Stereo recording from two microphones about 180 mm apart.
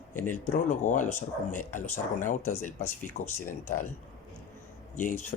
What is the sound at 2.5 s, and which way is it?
Speech, 10° left (ahead or behind).